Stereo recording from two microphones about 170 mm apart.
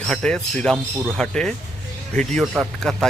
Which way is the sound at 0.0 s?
5° left (ahead or behind).